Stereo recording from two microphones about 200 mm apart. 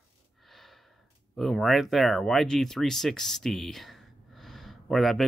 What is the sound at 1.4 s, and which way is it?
Speech, centre (ahead or behind).